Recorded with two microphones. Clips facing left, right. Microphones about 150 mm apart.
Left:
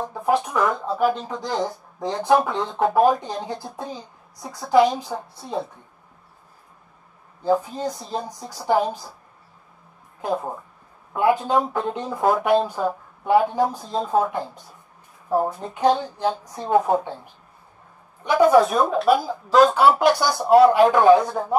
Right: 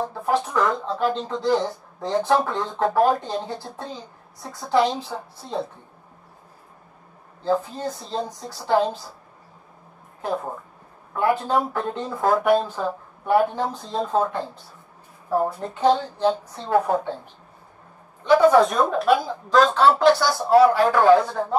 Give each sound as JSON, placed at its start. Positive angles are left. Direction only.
{"t": 0.1, "sound": "speech", "side_deg": 15}
{"t": 7.4, "sound": "speech", "side_deg": 15}
{"t": 10.2, "sound": "speech", "side_deg": 15}
{"t": 18.2, "sound": "a woman's voice", "side_deg": 15}